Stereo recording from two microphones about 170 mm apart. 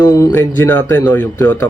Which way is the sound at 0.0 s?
20° left (ahead or behind).